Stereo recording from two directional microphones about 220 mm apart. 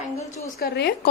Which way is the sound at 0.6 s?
45° left (ahead or behind).